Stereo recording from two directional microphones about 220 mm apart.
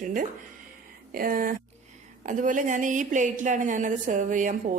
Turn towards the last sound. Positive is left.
turn(degrees=-35)  # may be behind; listen again after turning